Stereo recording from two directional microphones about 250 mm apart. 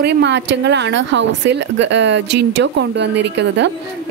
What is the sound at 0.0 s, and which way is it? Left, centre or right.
Speech, right.